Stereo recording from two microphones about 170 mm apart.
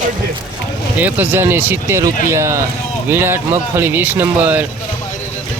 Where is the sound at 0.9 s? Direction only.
10° right (ahead or behind).